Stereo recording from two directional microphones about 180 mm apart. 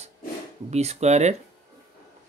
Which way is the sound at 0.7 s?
35° right (ahead or behind).